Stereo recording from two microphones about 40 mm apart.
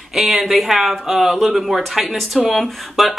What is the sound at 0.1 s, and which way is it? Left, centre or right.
Speech, centre.